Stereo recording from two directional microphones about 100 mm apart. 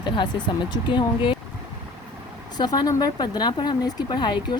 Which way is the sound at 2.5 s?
45° left (ahead or behind).